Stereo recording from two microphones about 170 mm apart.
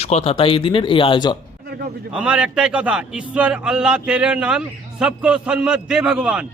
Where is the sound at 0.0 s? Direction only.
35° left (ahead or behind).